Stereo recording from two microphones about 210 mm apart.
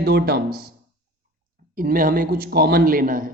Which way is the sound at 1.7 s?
40° right (ahead or behind).